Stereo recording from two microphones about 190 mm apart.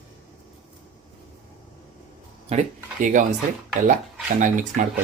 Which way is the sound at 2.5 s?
40° right (ahead or behind).